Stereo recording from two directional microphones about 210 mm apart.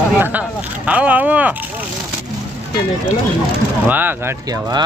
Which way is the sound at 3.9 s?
10° right (ahead or behind).